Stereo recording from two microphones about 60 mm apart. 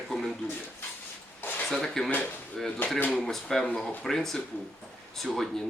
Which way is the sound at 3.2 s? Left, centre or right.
Centre.